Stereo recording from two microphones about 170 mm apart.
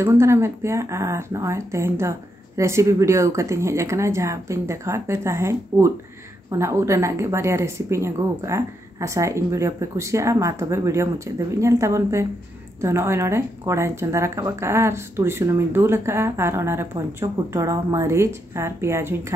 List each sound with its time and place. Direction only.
0.0 s speech: 15° right (ahead or behind)